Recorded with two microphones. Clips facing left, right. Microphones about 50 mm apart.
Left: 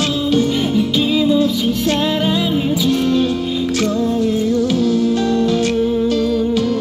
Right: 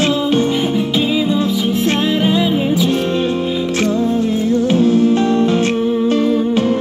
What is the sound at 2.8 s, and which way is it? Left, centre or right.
Music, right.